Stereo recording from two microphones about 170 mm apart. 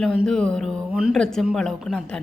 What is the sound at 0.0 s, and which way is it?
Speech, centre (ahead or behind).